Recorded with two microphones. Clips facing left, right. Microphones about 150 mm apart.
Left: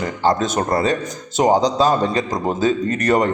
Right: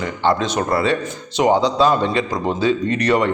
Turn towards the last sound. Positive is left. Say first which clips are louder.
# even
turn(degrees=45)  # may be behind; listen again after turning